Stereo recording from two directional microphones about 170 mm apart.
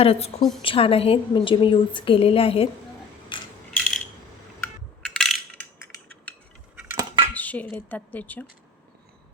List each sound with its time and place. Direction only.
0.0 s a woman's voice: 35° left (ahead or behind)
3.3 s coin: 30° left (ahead or behind)
3.7 s a sound: 5° left (ahead or behind)
4.6 s coin: 5° left (ahead or behind)
7.3 s a woman's voice: 10° left (ahead or behind)